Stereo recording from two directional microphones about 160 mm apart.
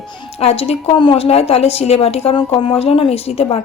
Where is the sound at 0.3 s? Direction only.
40° left (ahead or behind).